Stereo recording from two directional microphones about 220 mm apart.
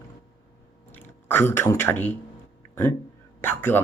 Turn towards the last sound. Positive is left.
turn(degrees=10)  # may be behind; listen again after turning